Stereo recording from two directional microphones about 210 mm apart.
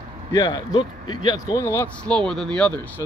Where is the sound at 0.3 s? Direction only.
20° left (ahead or behind).